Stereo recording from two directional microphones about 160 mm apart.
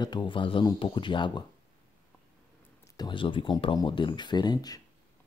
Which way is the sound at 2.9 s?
30° left (ahead or behind).